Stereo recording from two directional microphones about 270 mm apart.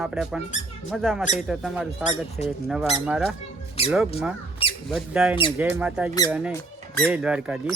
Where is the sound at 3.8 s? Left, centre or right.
Left.